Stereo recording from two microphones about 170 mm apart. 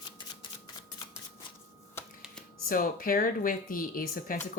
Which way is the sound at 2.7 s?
55° left (ahead or behind).